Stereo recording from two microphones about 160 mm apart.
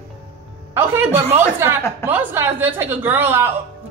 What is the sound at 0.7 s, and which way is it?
A woman's voice, 15° right (ahead or behind).